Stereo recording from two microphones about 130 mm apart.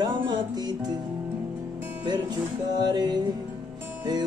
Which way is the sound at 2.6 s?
30° right (ahead or behind).